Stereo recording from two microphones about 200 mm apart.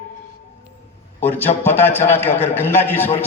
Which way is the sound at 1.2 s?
10° left (ahead or behind).